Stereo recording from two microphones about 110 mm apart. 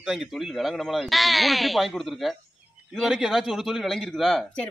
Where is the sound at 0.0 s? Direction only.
5° right (ahead or behind).